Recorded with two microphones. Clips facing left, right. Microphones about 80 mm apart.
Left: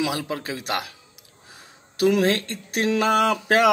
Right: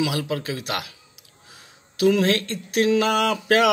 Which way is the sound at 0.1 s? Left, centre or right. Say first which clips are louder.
Right 2 dB; left.